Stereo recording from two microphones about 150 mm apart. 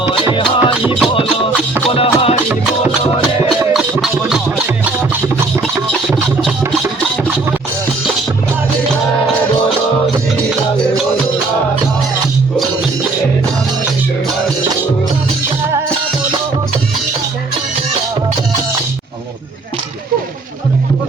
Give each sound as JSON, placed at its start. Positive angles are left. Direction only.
{"t": 0.3, "sound": "music", "side_deg": 35}
{"t": 3.7, "sound": "music", "side_deg": 0}